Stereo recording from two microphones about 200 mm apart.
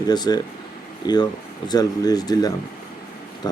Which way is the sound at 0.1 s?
20° left (ahead or behind).